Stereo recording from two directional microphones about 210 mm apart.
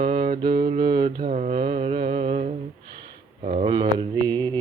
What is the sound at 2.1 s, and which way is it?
Humming, 35° right (ahead or behind).